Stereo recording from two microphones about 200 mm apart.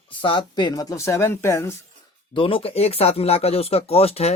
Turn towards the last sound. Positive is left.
turn(degrees=30)  # may be behind; listen again after turning